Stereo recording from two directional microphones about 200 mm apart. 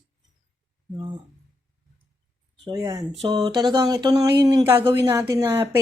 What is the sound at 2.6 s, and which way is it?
Speech, 20° right (ahead or behind).